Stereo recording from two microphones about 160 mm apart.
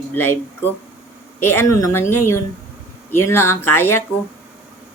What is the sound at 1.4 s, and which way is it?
Speech, 15° left (ahead or behind).